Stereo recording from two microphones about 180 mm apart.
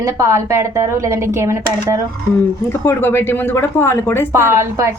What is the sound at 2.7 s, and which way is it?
Speech, 15° left (ahead or behind).